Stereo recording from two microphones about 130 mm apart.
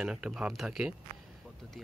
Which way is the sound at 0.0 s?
5° right (ahead or behind).